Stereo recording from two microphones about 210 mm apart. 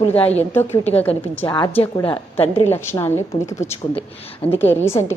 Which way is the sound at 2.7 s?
10° left (ahead or behind).